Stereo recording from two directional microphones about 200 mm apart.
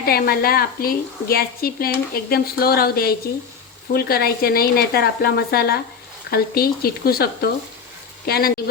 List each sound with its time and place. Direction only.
0.0 s a woman's voice: 50° left (ahead or behind)